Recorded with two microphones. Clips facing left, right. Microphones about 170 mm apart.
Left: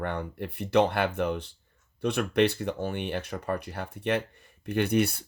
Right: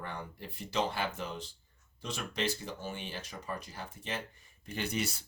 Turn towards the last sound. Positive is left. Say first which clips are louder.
# left 11 dB
turn(degrees=60)  # may be behind; listen again after turning